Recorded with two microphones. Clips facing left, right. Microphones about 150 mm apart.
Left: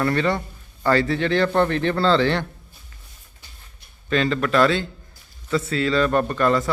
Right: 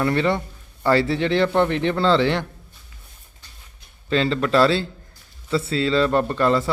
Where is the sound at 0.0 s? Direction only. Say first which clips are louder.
Right 1 dB; 20° right (ahead or behind).